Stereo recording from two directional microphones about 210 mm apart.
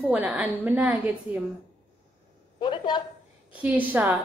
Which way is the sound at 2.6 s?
20° left (ahead or behind).